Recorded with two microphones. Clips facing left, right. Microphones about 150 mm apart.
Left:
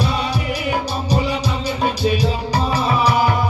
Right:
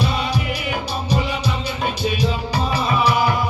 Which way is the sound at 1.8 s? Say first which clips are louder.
Left 4 dB; 35° left (ahead or behind).